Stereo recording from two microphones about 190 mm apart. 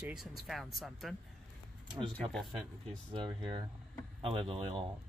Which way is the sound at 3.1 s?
25° right (ahead or behind).